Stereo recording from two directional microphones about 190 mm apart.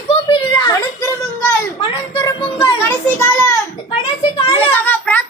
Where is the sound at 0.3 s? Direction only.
20° left (ahead or behind).